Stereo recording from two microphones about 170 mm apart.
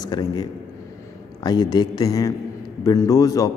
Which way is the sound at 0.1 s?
25° left (ahead or behind).